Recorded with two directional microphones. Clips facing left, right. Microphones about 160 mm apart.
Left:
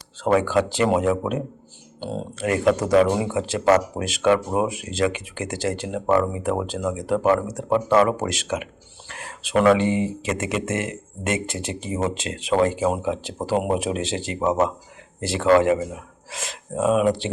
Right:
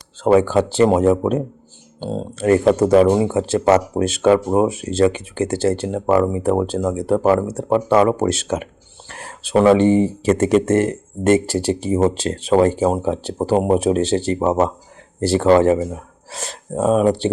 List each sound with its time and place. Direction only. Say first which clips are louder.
0.3 s speech: right 5 dB; 30° right (ahead or behind)